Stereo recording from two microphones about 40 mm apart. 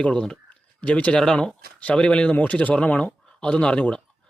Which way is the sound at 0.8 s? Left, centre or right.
Left.